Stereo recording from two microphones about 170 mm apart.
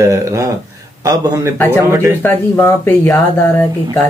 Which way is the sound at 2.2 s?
15° left (ahead or behind).